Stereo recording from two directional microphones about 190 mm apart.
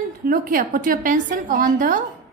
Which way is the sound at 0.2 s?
50° right (ahead or behind).